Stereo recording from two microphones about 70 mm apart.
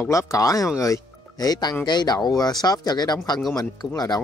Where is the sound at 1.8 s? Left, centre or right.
Left.